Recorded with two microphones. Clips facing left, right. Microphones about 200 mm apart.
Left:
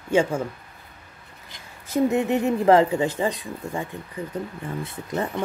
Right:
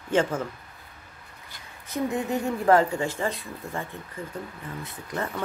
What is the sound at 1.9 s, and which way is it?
A woman's voice, 25° left (ahead or behind).